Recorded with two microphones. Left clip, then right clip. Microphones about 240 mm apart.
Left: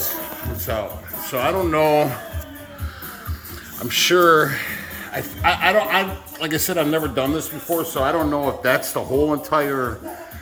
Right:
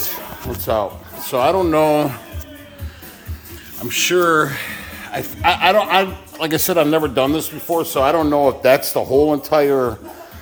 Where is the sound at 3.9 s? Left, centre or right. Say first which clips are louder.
Left 1 dB; centre.